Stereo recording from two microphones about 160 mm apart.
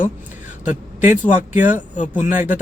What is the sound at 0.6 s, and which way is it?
A man's voice, 50° left (ahead or behind).